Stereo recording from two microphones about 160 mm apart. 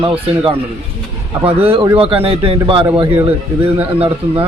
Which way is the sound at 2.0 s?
35° right (ahead or behind).